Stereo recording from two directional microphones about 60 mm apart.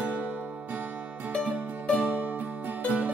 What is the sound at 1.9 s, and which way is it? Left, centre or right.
Music, right.